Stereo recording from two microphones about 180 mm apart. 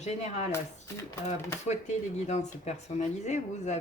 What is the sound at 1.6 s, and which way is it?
Speech, 40° left (ahead or behind).